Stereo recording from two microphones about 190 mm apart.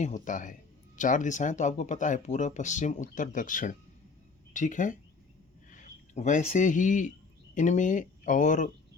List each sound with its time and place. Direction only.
0.0 s speech: 40° left (ahead or behind)